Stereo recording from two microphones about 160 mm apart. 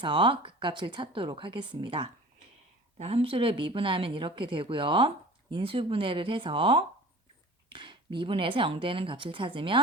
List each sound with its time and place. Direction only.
0.0 s speech: 30° right (ahead or behind)